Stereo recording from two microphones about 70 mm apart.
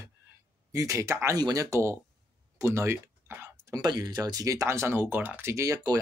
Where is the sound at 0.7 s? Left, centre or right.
Right.